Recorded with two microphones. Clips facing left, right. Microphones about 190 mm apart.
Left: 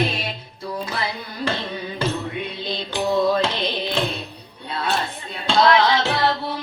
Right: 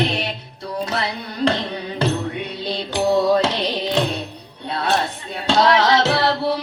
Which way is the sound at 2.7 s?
75° right (ahead or behind).